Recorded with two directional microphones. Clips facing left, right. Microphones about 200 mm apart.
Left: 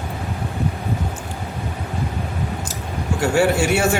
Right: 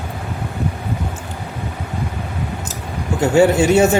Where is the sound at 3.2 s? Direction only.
20° right (ahead or behind).